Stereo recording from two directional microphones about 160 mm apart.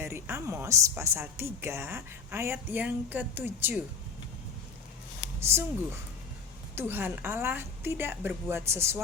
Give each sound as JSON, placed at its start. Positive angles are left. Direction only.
{"t": 0.0, "sound": "a woman's voice", "side_deg": -15}
{"t": 5.4, "sound": "speech", "side_deg": -15}
{"t": 6.7, "sound": "a woman's voice", "side_deg": -15}